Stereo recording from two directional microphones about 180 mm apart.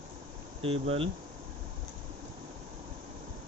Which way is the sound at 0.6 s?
35° right (ahead or behind).